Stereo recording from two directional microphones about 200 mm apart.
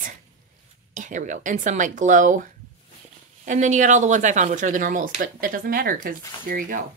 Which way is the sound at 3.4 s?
40° right (ahead or behind).